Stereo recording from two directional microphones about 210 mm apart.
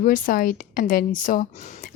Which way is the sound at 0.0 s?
40° left (ahead or behind).